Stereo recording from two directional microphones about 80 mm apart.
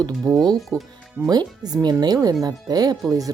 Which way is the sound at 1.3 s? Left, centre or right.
Right.